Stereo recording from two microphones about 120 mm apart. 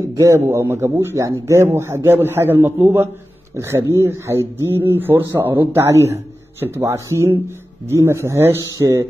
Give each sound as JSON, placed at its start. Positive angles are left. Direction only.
{"t": 0.1, "sound": "speech", "side_deg": -25}